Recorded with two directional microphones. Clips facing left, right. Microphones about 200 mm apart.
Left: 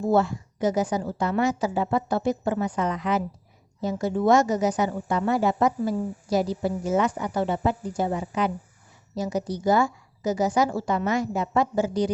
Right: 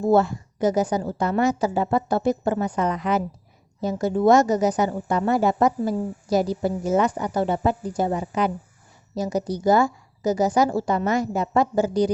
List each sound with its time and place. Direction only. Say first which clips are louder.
0.1 s a woman's voice: right 3 dB; 45° right (ahead or behind)